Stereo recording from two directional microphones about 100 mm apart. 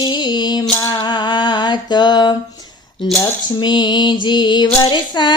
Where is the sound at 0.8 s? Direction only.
45° left (ahead or behind).